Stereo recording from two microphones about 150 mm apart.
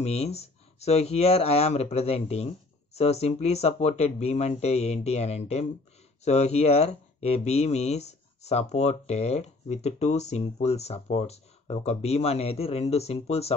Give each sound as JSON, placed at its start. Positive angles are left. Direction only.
{"t": 0.0, "sound": "speech", "side_deg": 45}